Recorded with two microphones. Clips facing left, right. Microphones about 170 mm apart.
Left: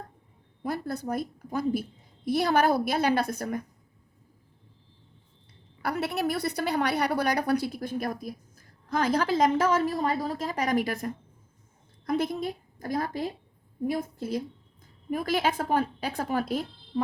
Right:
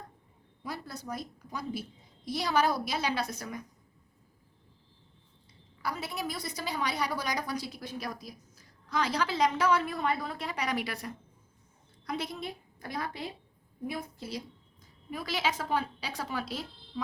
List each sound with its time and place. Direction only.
0.6 s a woman's voice: 55° left (ahead or behind)
5.8 s a woman's voice: 65° left (ahead or behind)